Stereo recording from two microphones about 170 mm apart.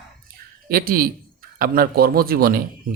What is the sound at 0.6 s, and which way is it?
A man's voice, 60° right (ahead or behind).